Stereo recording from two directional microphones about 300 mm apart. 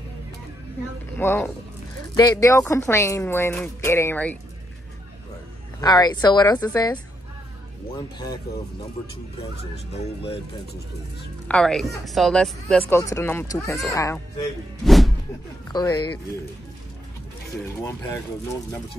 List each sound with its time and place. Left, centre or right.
1.1 s speech: centre
5.8 s speech: centre
11.4 s a woman's voice: centre
14.9 s music: centre
15.7 s speech: centre